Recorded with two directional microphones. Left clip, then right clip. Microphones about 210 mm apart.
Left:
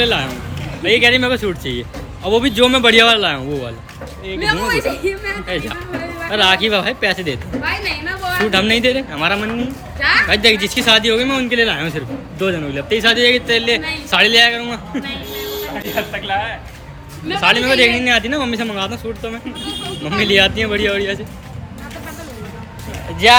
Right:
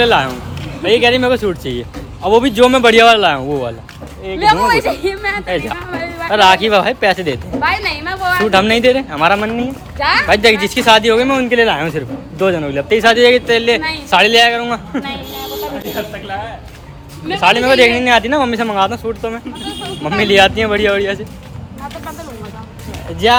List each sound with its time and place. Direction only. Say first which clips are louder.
0.0 s a woman's voice: right 5 dB; 5° left (ahead or behind)
17.2 s a woman's voice: right 3 dB; 5° left (ahead or behind)